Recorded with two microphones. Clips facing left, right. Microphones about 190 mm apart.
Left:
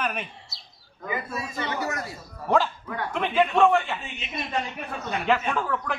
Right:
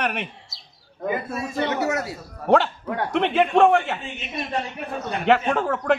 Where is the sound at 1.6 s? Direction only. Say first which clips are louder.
Right 7 dB; 70° right (ahead or behind).